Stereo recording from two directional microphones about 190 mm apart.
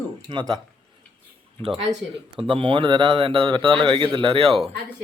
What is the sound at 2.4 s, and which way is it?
A man's voice, 25° right (ahead or behind).